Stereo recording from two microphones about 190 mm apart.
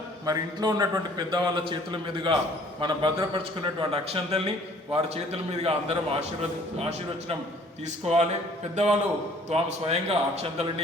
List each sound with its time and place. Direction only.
0.3 s a man's voice: 20° right (ahead or behind)
8.0 s a man's voice: 35° right (ahead or behind)